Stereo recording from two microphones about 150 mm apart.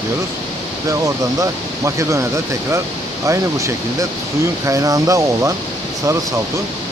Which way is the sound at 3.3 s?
20° right (ahead or behind).